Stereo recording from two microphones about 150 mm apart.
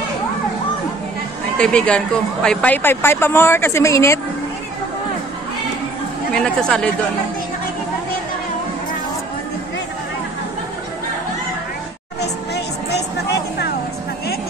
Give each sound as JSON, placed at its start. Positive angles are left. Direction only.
{"t": 1.6, "sound": "speech", "side_deg": 5}
{"t": 6.3, "sound": "speech", "side_deg": 5}
{"t": 12.2, "sound": "music", "side_deg": 90}